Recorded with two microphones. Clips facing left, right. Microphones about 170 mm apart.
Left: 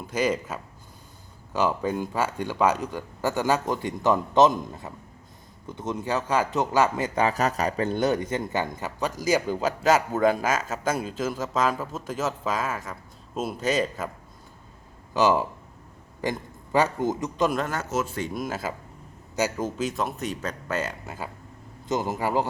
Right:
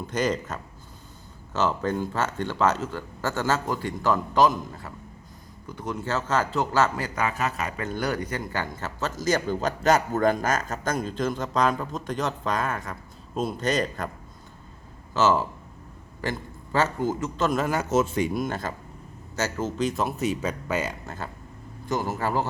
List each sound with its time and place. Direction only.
0.1 s a man's voice: 5° left (ahead or behind)
7.3 s speech: 40° left (ahead or behind); by 14.1 s 5° left (ahead or behind)
15.1 s a man's voice: 15° left (ahead or behind)
17.7 s speech: 10° right (ahead or behind)
18.3 s speech: 5° left (ahead or behind)
21.8 s speech: 20° left (ahead or behind)